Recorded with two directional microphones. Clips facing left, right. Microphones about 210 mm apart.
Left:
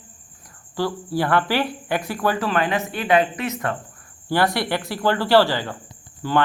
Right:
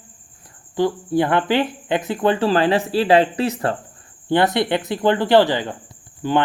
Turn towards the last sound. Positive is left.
turn(degrees=-20)  # may be behind; listen again after turning